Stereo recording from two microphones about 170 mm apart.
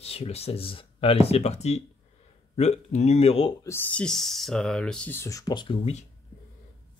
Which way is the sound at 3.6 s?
10° left (ahead or behind).